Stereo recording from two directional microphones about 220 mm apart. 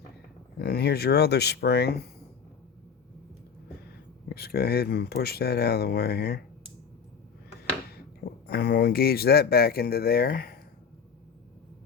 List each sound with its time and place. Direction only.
0.6 s speech: 45° left (ahead or behind)
4.3 s speech: 45° left (ahead or behind)
7.9 s speech: 45° left (ahead or behind)